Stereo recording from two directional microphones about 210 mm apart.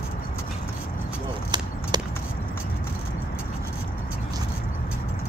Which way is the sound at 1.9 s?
20° right (ahead or behind).